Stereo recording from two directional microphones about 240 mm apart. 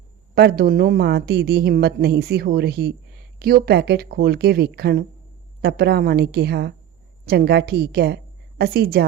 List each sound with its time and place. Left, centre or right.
0.3 s a woman's voice: right